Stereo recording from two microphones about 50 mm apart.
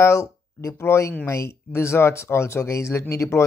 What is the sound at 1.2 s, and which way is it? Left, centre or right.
Speech, left.